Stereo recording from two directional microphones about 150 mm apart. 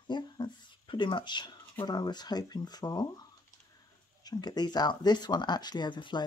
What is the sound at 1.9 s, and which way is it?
Speech, 30° left (ahead or behind).